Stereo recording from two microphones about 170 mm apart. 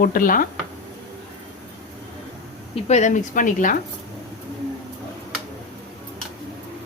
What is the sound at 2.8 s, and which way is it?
Speech, 45° left (ahead or behind).